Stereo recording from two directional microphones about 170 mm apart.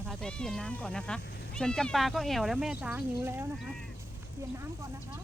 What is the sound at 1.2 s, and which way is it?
Speech, 80° left.